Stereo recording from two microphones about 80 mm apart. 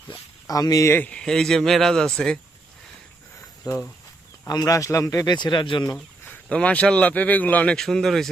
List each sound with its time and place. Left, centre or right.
0.4 s speech: left
0.9 s speech: left
1.1 s a man's voice: centre
3.6 s speech: left
5.3 s speech: left
6.2 s a man's voice: centre
7.8 s speech: centre